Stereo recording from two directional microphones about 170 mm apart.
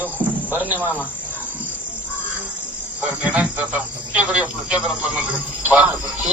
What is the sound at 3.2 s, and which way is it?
Speech, 10° right (ahead or behind).